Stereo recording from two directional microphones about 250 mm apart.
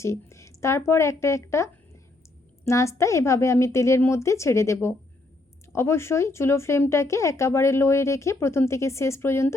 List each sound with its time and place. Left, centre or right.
0.0 s a woman's voice: centre